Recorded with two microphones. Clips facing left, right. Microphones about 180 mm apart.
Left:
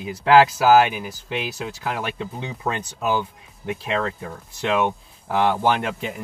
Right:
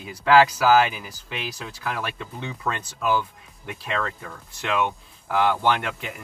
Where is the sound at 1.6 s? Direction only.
25° left (ahead or behind).